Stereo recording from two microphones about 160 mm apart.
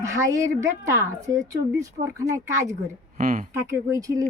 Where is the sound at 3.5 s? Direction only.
20° right (ahead or behind).